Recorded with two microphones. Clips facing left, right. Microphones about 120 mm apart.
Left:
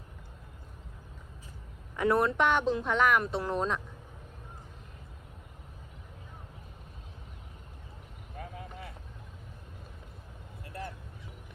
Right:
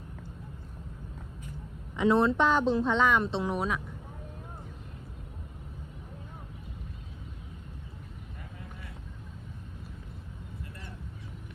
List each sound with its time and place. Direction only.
2.0 s speech: 25° right (ahead or behind)
3.4 s speech: 10° right (ahead or behind)